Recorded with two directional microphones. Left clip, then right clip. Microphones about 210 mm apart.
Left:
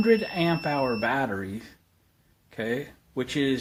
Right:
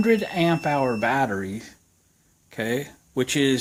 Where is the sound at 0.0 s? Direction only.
35° right (ahead or behind).